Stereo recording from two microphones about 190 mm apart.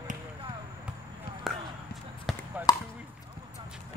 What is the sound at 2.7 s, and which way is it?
Chop, 20° left (ahead or behind).